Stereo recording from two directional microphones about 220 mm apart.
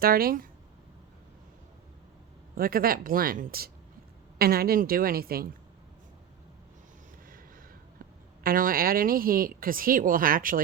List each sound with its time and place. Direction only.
0.0 s a woman's voice: 40° right (ahead or behind)
2.6 s a woman's voice: 40° right (ahead or behind)
8.4 s a woman's voice: 40° right (ahead or behind)